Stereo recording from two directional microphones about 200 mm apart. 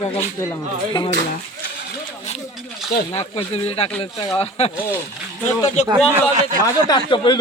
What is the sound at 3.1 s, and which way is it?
Speech, 30° left (ahead or behind).